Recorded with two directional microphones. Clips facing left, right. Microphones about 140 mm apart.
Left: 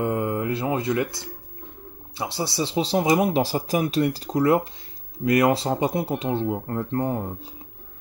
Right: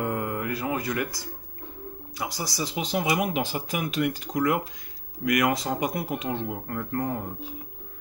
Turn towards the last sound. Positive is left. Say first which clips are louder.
# left 4 dB
turn(degrees=30)  # may be behind; listen again after turning